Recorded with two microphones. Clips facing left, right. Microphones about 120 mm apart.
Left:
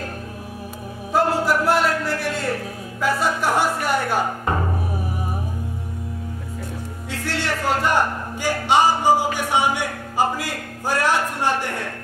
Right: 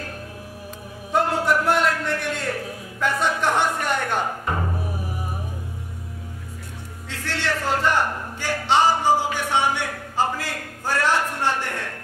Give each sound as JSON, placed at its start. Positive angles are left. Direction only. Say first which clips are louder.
{"t": 1.1, "sound": "music", "louder": "left 1 dB", "side_deg": 0}
{"t": 7.3, "sound": "music", "louder": "left 1 dB", "side_deg": 10}